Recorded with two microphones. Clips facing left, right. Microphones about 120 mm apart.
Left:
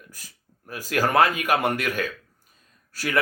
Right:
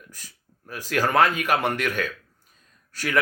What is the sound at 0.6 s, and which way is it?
Speech, 40° left (ahead or behind).